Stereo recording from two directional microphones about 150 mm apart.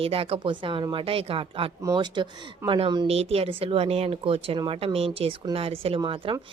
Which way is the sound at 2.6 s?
35° right (ahead or behind).